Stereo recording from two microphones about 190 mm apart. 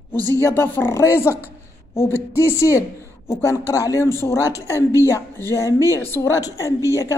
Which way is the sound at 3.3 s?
15° left (ahead or behind).